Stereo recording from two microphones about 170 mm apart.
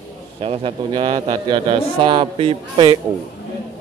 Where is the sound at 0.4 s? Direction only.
35° right (ahead or behind).